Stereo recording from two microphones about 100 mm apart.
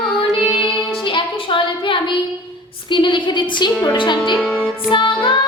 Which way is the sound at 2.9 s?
55° left (ahead or behind).